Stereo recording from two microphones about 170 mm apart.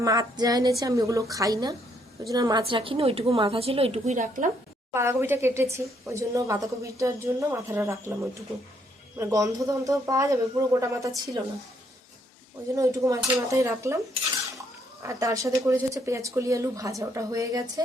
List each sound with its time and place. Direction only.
0.0 s a woman's voice: 20° right (ahead or behind); by 4.5 s 50° right (ahead or behind)
4.9 s a woman's voice: 15° right (ahead or behind)
12.7 s a woman's voice: 20° right (ahead or behind)
15.0 s speech: 20° right (ahead or behind)